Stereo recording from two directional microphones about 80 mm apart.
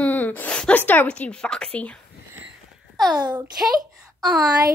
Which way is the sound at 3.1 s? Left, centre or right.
Right.